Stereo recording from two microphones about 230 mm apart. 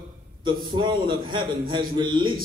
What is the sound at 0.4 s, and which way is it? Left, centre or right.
A man's voice, centre.